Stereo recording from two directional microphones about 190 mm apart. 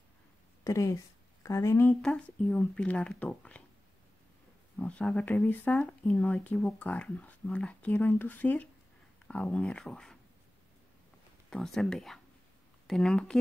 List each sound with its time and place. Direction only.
0.7 s a woman's voice: 15° left (ahead or behind)
2.0 s speech: 5° left (ahead or behind)
4.7 s speech: 5° left (ahead or behind)
11.5 s speech: centre (ahead or behind)